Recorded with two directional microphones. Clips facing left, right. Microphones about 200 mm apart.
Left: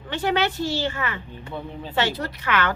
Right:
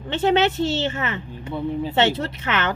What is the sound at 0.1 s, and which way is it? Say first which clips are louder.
A woman's voice: right 5 dB; 25° right (ahead or behind).